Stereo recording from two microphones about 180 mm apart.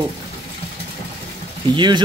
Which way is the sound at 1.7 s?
25° right (ahead or behind).